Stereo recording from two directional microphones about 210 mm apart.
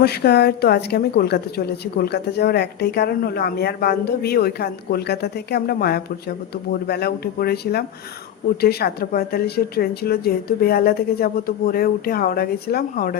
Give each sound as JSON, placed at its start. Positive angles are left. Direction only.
{"t": 0.0, "sound": "a woman's voice", "side_deg": 50}